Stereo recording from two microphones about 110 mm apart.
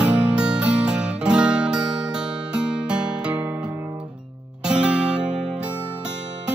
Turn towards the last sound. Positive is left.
turn(degrees=-10)  # may be behind; listen again after turning